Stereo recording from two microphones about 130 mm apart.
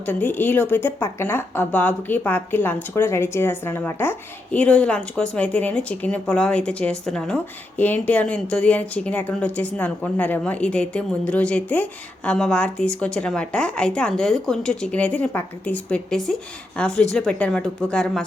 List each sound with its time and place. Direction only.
0.0 s speech: 15° left (ahead or behind)